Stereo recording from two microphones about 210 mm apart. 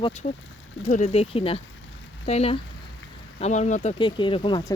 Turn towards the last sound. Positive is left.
turn(degrees=20)  # may be behind; listen again after turning